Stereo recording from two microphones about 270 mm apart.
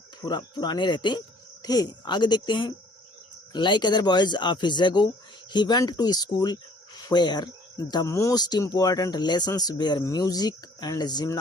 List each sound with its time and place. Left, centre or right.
0.2 s speech: centre